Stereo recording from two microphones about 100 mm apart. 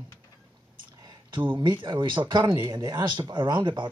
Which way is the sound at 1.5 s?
55° right (ahead or behind).